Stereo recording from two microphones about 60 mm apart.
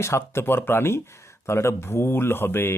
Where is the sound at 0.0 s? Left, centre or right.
Left.